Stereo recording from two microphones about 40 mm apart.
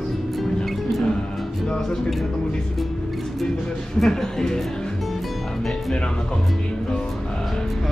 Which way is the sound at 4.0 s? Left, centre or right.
Centre.